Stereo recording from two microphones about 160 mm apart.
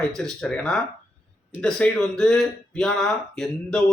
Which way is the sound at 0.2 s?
5° left (ahead or behind).